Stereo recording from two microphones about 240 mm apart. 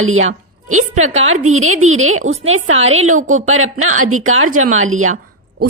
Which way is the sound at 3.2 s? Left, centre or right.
Right.